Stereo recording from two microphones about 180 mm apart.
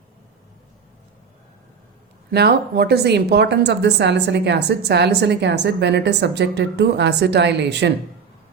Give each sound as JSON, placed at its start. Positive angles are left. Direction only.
{"t": 2.3, "sound": "a woman's voice", "side_deg": -65}